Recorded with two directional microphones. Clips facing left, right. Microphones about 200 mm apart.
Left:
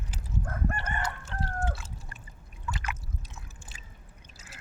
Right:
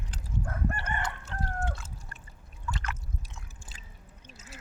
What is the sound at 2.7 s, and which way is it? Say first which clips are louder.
Water: left 1 dB; 15° left (ahead or behind).